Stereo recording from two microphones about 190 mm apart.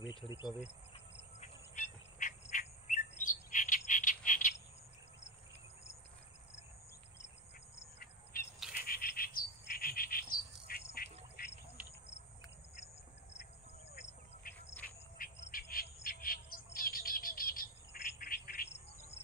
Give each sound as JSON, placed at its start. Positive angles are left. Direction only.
{"t": 0.0, "sound": "insect", "side_deg": 25}
{"t": 1.4, "sound": "bird", "side_deg": 40}
{"t": 8.3, "sound": "bird", "side_deg": 50}
{"t": 8.8, "sound": "insect", "side_deg": 50}
{"t": 14.4, "sound": "insect", "side_deg": 50}
{"t": 15.2, "sound": "bird", "side_deg": 50}
{"t": 18.2, "sound": "insect", "side_deg": 50}